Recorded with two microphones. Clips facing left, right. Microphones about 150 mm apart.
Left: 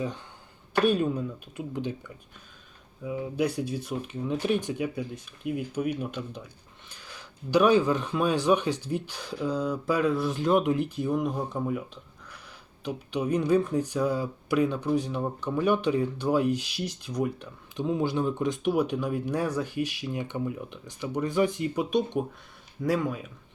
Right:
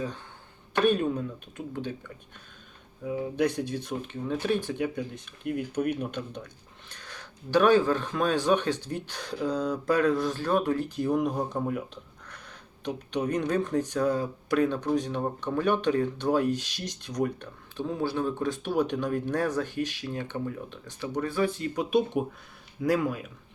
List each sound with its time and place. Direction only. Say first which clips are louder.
0.7 s speech: even; 10° left (ahead or behind)
3.1 s speech: right 1 dB; 5° left (ahead or behind)
10.3 s speech: left 2 dB; 20° left (ahead or behind)
10.9 s speech: right 1 dB; centre (ahead or behind)
18.0 s speech: right 1 dB; 20° left (ahead or behind)
21.8 s speech: right 2 dB; 5° right (ahead or behind)